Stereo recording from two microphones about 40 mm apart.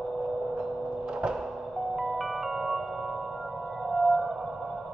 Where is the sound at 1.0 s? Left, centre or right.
Right.